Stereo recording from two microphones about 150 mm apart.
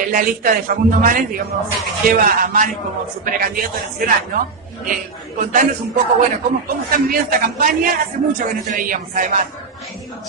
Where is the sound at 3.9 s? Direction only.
75° right (ahead or behind).